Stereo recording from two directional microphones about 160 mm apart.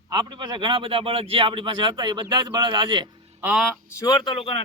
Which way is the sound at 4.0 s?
25° left (ahead or behind).